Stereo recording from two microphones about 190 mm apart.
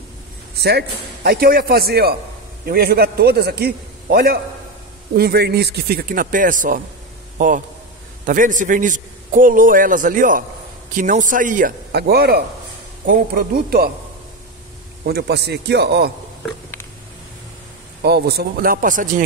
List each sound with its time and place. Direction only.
0.6 s a man's voice: 60° right (ahead or behind)
11.9 s a man's voice: 55° right (ahead or behind)
15.0 s speech: 60° right (ahead or behind)
18.0 s a man's voice: 60° right (ahead or behind)